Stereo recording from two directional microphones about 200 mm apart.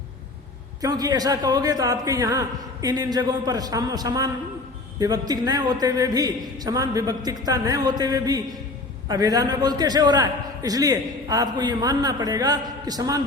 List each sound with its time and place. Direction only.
0.8 s a man's voice: 20° right (ahead or behind)